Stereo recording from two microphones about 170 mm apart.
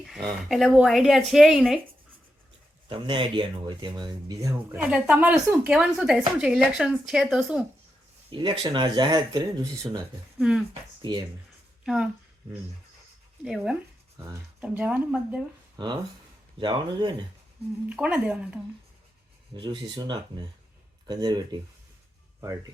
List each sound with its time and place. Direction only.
0.0 s speech: centre (ahead or behind)
2.9 s speech: 30° right (ahead or behind); by 7.6 s 5° right (ahead or behind)
8.3 s speech: 25° right (ahead or behind)
10.3 s speech: 5° right (ahead or behind)
13.4 s speech: 5° right (ahead or behind)
16.6 s speech: 30° right (ahead or behind)
17.8 s speech: 10° right (ahead or behind)
19.5 s speech: 25° right (ahead or behind)